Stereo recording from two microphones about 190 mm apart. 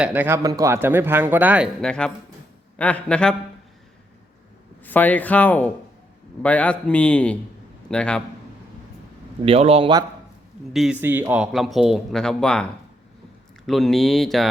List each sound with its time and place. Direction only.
0.0 s a man's voice: 10° right (ahead or behind)
4.8 s speech: 10° left (ahead or behind)
9.4 s speech: 30° right (ahead or behind)
10.7 s speech: centre (ahead or behind)
13.7 s speech: centre (ahead or behind)